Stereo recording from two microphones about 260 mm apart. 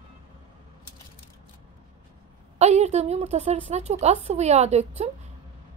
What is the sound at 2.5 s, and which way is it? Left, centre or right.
A woman's voice, right.